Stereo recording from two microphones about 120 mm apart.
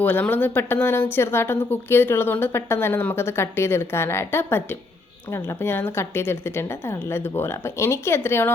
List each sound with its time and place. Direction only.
0.0 s a woman's voice: 15° left (ahead or behind)